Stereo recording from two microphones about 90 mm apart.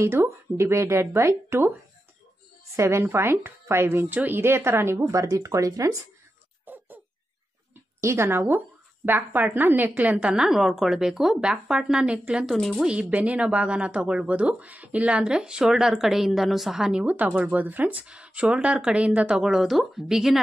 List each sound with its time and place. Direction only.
0.0 s a woman's voice: 30° right (ahead or behind)
2.7 s a woman's voice: 30° right (ahead or behind)
6.6 s dog: 20° right (ahead or behind)
8.0 s speech: 30° right (ahead or behind); by 12.4 s 10° right (ahead or behind)
12.4 s speech: centre (ahead or behind)